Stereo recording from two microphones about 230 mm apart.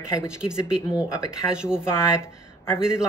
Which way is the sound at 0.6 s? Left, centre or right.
Centre.